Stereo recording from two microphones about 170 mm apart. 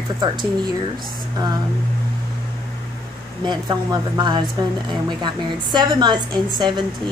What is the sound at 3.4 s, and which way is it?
A woman's voice, 25° right (ahead or behind).